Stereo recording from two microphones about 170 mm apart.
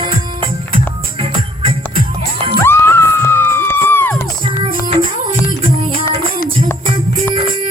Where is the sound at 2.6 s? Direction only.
15° left (ahead or behind).